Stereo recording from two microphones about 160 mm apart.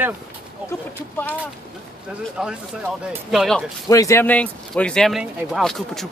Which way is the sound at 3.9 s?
20° left (ahead or behind).